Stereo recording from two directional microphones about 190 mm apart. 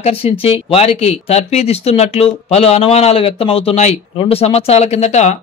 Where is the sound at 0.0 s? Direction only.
30° left (ahead or behind).